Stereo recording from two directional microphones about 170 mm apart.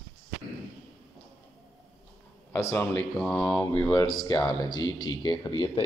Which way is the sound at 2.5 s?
10° left (ahead or behind).